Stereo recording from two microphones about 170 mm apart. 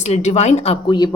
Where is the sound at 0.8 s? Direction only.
25° left (ahead or behind).